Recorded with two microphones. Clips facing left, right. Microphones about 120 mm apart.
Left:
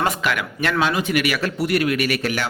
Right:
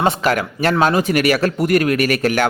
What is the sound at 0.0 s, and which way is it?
Speech, 25° right (ahead or behind).